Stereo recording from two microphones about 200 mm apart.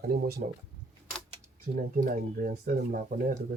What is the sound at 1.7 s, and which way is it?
Speech, 50° right (ahead or behind).